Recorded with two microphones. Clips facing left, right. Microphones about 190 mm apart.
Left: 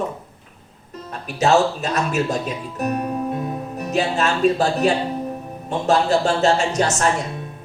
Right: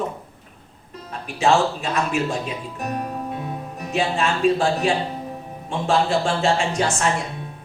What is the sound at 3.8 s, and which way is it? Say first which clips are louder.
Speech: left 2 dB; 40° left (ahead or behind).